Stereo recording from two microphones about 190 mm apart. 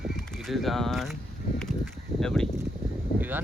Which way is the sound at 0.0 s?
Centre (ahead or behind).